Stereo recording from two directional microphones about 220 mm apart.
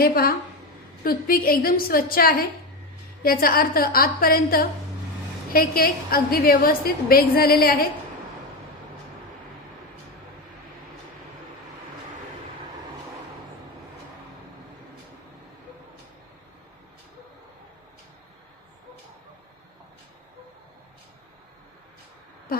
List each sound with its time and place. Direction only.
0.0 s a woman's voice: 40° left (ahead or behind)